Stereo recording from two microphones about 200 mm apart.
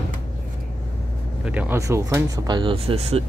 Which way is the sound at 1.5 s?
15° right (ahead or behind).